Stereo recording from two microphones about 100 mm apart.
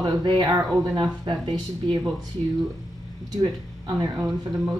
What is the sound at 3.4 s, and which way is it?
Speech, 40° right (ahead or behind).